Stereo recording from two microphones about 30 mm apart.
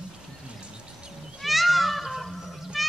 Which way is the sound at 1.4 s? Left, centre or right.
Centre.